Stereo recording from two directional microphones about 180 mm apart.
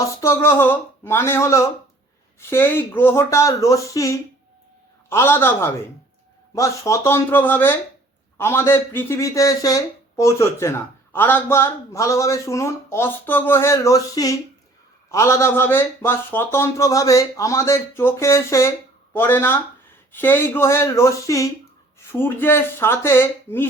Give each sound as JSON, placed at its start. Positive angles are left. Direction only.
{"t": 0.0, "sound": "speech", "side_deg": 15}